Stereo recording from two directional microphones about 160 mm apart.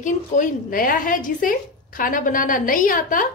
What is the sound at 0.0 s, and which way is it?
Speech, 55° left (ahead or behind).